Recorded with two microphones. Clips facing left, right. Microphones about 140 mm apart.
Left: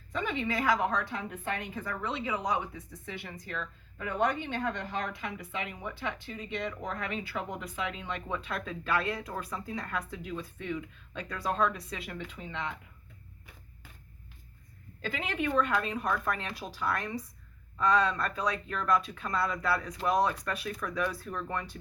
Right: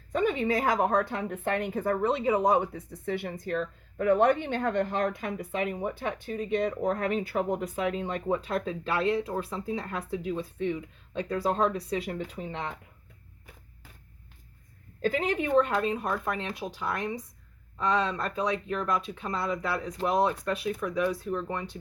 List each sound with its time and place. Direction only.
0.1 s a woman's voice: 45° right (ahead or behind)
15.0 s speech: 40° right (ahead or behind); by 21.8 s 20° right (ahead or behind)